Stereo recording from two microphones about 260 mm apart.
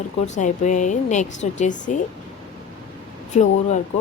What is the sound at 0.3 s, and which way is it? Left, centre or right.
A woman's voice, left.